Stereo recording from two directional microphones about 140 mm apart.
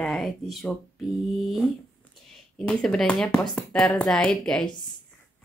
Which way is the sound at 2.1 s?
5° left (ahead or behind).